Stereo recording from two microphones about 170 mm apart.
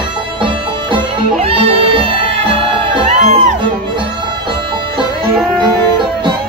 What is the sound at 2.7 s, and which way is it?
Music, 45° right (ahead or behind).